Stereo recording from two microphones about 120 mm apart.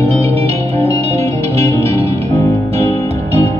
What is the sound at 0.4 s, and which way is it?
Music, 60° right (ahead or behind).